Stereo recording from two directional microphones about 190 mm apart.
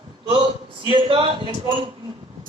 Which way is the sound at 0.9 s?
25° right (ahead or behind).